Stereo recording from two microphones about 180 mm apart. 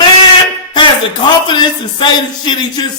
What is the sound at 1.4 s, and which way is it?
A man's voice, 25° left (ahead or behind).